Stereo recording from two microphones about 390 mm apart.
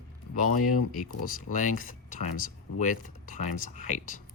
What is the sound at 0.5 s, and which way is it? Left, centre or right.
Speech, left.